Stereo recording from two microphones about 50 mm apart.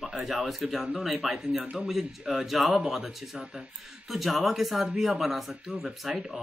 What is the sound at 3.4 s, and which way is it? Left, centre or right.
Speech, centre.